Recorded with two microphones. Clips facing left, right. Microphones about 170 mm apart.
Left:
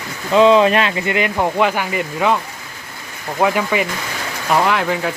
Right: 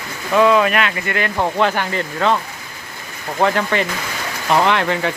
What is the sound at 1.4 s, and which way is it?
Speech, 10° left (ahead or behind).